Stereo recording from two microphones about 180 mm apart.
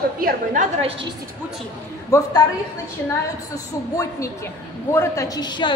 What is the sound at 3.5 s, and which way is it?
A woman's voice, 20° left (ahead or behind).